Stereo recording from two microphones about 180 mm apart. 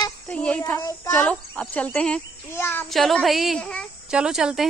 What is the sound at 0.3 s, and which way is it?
Child singing, 5° left (ahead or behind).